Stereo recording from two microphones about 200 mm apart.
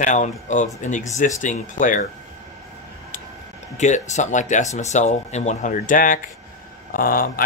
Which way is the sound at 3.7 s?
35° left (ahead or behind).